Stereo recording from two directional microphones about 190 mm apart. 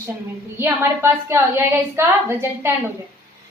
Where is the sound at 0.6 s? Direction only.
10° right (ahead or behind).